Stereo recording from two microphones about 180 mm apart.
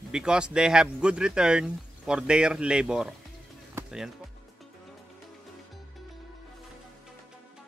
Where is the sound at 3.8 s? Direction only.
15° right (ahead or behind).